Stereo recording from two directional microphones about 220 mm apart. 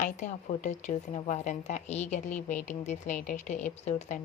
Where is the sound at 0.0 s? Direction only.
35° left (ahead or behind).